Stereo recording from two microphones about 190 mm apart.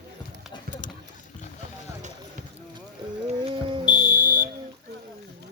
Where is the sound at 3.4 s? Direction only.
25° right (ahead or behind).